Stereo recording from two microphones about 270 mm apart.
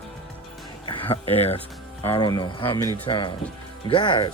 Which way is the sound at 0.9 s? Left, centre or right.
Left.